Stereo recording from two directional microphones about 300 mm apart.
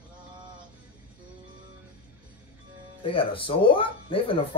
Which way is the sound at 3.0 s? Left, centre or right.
Centre.